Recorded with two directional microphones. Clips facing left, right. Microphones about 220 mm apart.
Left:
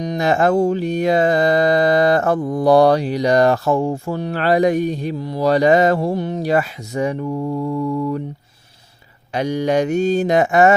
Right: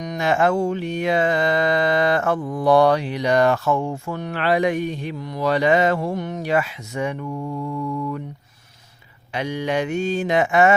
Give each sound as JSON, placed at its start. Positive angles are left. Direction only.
{"t": 0.0, "sound": "mantra", "side_deg": 35}
{"t": 9.3, "sound": "mantra", "side_deg": 40}